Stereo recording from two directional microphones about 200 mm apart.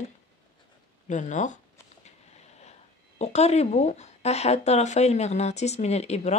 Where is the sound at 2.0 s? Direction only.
35° left (ahead or behind).